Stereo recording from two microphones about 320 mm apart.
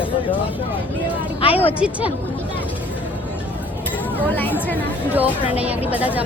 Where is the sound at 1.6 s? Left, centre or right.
Centre.